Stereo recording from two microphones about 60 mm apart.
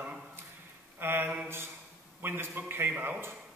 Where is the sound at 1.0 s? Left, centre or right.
Right.